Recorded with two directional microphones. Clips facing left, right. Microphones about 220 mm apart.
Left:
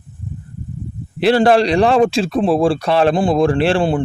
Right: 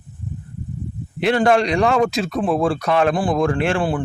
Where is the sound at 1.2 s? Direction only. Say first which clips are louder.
Left 4 dB; 35° left (ahead or behind).